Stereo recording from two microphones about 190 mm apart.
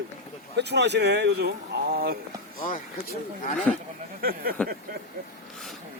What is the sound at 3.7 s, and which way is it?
Speech, 5° left (ahead or behind).